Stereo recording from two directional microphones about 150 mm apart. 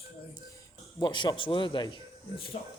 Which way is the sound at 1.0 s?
30° left (ahead or behind).